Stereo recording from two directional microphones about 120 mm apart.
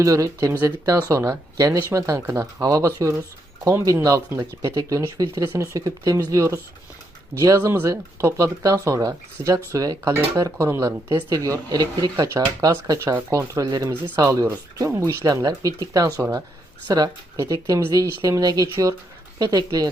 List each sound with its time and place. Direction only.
0.0 s speech: 30° right (ahead or behind)